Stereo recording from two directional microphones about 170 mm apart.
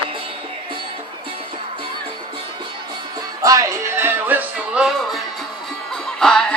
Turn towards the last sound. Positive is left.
turn(degrees=5)  # may be behind; listen again after turning